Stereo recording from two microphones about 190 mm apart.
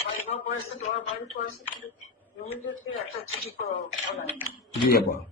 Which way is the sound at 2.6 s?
90° left.